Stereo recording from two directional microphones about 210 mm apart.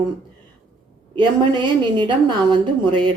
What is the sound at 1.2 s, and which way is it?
Speech, 20° right (ahead or behind).